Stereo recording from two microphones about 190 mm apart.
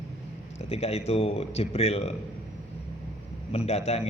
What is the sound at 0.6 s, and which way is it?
A man's voice, 35° left (ahead or behind).